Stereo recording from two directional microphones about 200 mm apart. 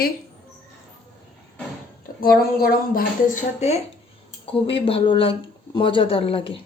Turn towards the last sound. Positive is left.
turn(degrees=25)  # may be behind; listen again after turning